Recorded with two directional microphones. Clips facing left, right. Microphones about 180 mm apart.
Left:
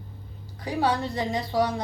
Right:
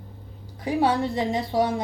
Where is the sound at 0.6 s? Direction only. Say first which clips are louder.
Right 3 dB; 20° right (ahead or behind).